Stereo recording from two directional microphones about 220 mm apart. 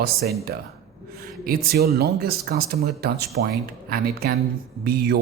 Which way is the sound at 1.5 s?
45° right (ahead or behind).